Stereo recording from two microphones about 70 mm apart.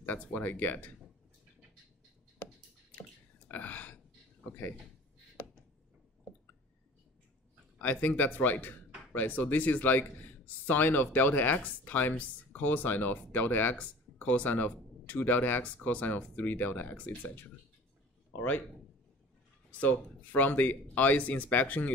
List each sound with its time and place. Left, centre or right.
0.0 s speech: left
3.0 s drip: left
4.5 s speech: left
7.8 s speech: left
19.8 s speech: left